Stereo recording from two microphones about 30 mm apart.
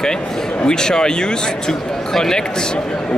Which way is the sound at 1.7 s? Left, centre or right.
Centre.